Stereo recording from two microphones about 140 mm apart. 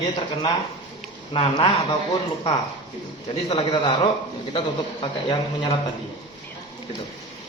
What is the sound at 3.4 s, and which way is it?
A man's voice, 40° left (ahead or behind).